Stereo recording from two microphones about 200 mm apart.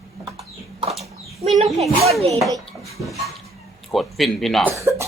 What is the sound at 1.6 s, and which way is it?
Speech, centre (ahead or behind).